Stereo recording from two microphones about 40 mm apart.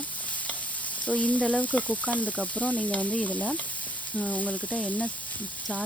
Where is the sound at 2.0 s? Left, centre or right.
Left.